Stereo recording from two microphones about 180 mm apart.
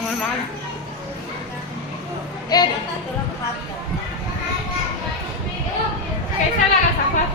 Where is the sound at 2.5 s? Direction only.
20° left (ahead or behind).